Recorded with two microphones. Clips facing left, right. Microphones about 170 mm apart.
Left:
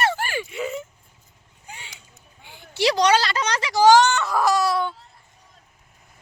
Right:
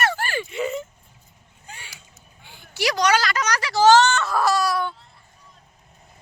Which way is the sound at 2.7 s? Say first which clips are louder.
Left 2 dB; 30° left (ahead or behind).